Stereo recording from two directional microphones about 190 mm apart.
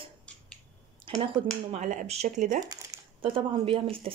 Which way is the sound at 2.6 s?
20° right (ahead or behind).